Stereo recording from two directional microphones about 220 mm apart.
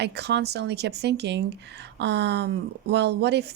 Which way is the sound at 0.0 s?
50° right (ahead or behind).